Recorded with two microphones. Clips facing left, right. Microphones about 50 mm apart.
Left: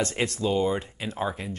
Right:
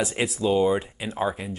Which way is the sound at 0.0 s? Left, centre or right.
Centre.